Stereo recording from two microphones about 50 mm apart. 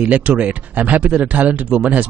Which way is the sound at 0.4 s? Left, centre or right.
Right.